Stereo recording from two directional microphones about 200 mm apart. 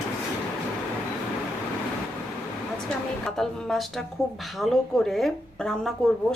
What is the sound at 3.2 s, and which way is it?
Speech, centre (ahead or behind).